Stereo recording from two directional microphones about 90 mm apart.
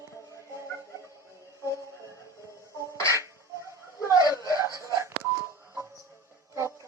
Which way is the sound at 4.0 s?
40° left (ahead or behind).